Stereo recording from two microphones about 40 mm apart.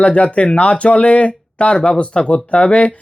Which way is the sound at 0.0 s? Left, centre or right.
Left.